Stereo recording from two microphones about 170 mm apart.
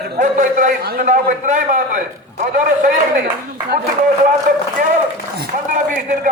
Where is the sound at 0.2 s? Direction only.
50° right (ahead or behind).